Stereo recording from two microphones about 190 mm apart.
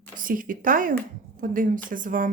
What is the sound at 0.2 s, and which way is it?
Speech, 45° right (ahead or behind).